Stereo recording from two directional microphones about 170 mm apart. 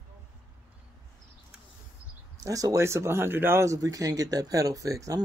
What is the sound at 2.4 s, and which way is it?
Speech, 20° right (ahead or behind).